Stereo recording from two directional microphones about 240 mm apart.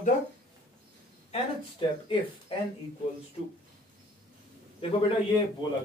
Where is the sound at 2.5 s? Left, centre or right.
Left.